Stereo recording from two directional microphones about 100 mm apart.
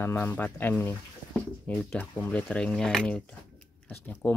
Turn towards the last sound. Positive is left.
turn(degrees=15)  # may be behind; listen again after turning